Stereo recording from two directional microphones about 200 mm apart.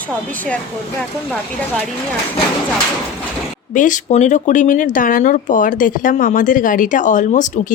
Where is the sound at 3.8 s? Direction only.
40° left (ahead or behind).